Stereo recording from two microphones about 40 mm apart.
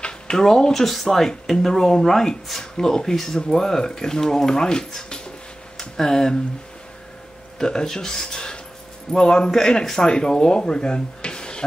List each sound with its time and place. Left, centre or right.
0.0 s speech: centre
2.6 s speech: centre
7.5 s a man's voice: centre